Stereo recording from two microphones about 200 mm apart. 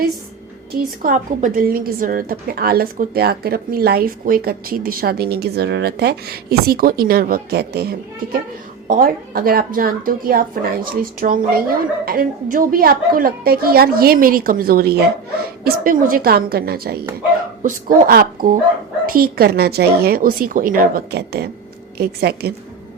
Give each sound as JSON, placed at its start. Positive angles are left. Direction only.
{"t": 1.0, "sound": "a woman's voice", "side_deg": -40}